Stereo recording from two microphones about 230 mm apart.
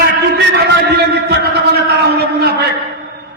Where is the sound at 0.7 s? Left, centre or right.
Right.